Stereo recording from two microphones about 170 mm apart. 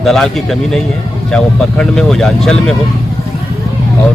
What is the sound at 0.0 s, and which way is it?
Speech, centre (ahead or behind).